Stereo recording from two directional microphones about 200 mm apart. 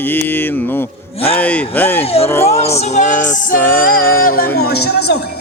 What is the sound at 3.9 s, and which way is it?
Speech, 50° left (ahead or behind).